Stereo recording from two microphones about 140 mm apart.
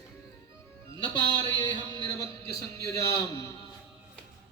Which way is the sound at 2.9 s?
20° left (ahead or behind).